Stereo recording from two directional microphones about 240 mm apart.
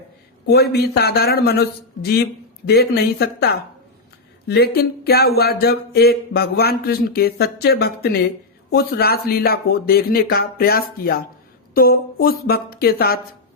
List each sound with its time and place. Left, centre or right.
0.4 s speech: left